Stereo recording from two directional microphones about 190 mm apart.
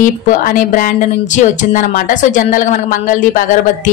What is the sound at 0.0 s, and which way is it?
Speech, 45° left (ahead or behind).